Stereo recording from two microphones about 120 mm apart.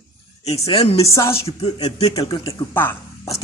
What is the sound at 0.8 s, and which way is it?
Speech, 55° left (ahead or behind).